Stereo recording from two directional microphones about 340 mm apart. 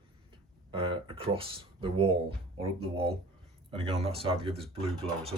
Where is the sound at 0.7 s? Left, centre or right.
Centre.